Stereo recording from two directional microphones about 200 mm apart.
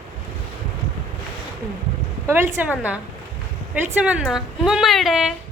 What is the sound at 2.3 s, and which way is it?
Speech, 10° right (ahead or behind).